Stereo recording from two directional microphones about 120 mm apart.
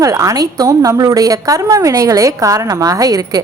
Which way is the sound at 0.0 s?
30° right (ahead or behind).